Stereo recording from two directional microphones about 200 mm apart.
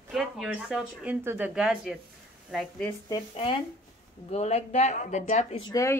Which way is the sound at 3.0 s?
25° left (ahead or behind).